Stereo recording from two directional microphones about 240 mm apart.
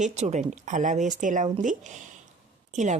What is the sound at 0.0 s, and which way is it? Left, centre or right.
A woman's voice, right.